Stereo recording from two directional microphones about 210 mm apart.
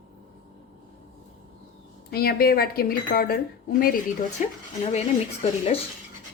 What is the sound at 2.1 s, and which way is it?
Speech, 45° left (ahead or behind).